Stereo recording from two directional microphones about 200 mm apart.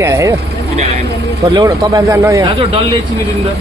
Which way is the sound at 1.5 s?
20° right (ahead or behind).